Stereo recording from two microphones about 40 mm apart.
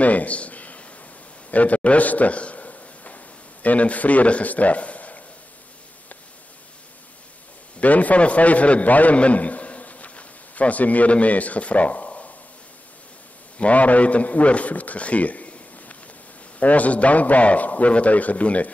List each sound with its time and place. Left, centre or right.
0.0 s a sound: left
3.6 s a man's voice: left
7.8 s a man's voice: left
13.6 s a man's voice: left